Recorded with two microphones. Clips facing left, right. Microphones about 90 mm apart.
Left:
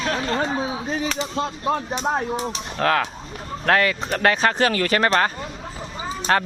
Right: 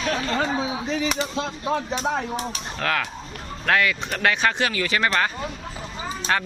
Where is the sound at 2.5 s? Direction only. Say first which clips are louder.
Left 8 dB; 35° left (ahead or behind).